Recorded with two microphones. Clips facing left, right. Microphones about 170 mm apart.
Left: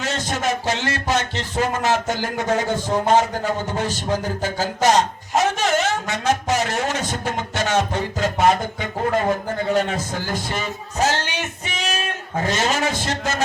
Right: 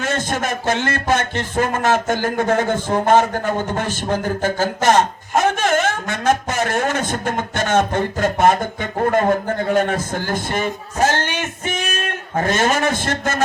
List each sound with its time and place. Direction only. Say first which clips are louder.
0.0 s a man's voice: right 2 dB; 50° right (ahead or behind)